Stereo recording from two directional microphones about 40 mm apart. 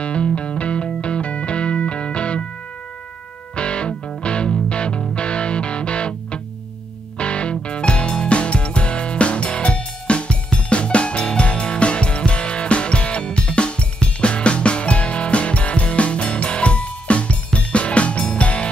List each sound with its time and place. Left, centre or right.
0.0 s music: left
3.5 s music: left